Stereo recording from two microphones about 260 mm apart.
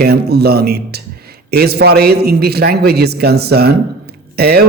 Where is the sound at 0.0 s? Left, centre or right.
Right.